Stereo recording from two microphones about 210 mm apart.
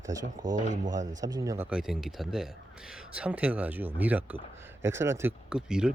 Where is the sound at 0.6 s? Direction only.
35° right (ahead or behind).